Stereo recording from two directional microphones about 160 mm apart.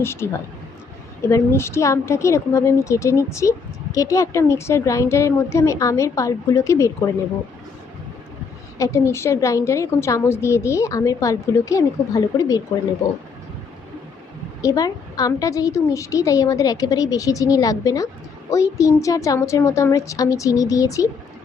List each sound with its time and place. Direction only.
0.0 s speech: 15° left (ahead or behind)
1.3 s a woman's voice: 15° left (ahead or behind)
8.8 s a woman's voice: 15° left (ahead or behind)
14.6 s a woman's voice: 20° left (ahead or behind)